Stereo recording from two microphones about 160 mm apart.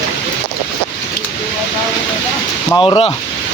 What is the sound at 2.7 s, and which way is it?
Speech, 30° left (ahead or behind).